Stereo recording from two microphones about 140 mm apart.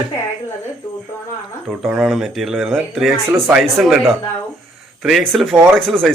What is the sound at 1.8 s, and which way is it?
Speech, 5° right (ahead or behind).